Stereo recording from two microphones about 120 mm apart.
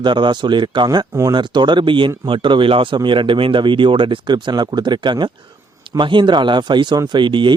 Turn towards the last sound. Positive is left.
turn(degrees=-40)  # may be behind; listen again after turning